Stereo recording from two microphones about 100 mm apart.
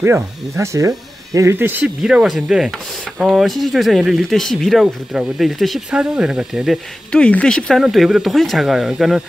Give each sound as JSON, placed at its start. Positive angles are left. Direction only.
{"t": 0.0, "sound": "speech", "side_deg": -25}
{"t": 2.0, "sound": "speech", "side_deg": -5}
{"t": 7.1, "sound": "speech", "side_deg": 10}